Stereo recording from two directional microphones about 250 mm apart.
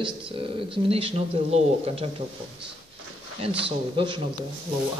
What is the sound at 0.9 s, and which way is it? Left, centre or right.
Speech, right.